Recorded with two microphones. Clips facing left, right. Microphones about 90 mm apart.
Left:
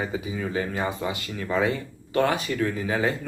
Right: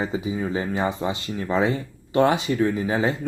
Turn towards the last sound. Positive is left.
turn(degrees=-25)  # may be behind; listen again after turning